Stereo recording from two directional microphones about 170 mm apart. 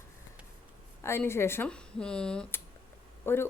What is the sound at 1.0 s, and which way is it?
Speech, 15° left (ahead or behind).